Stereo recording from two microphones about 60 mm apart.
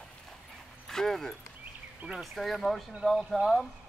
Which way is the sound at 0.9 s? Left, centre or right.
Centre.